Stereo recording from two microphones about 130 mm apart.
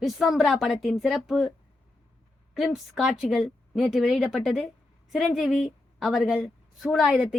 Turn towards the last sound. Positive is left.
turn(degrees=-5)  # may be behind; listen again after turning